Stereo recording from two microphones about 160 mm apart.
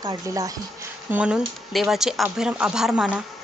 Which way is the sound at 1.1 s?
5° right (ahead or behind).